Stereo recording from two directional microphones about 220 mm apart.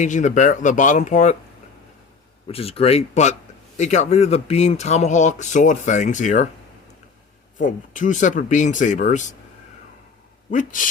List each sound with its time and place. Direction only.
0.0 s speech: 35° left (ahead or behind)
2.5 s speech: 25° left (ahead or behind)
7.6 s speech: 35° left (ahead or behind)
10.5 s speech: 35° left (ahead or behind)